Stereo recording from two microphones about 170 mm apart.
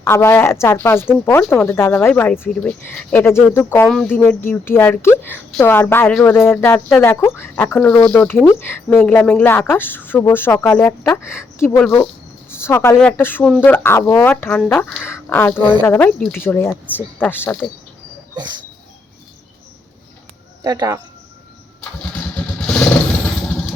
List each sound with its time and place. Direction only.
0.0 s a woman's voice: 15° left (ahead or behind)
20.7 s speech: 20° right (ahead or behind)
22.6 s vehicle: 5° left (ahead or behind)